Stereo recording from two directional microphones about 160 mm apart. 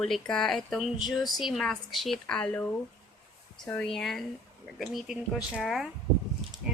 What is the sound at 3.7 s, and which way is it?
Speech, 5° left (ahead or behind).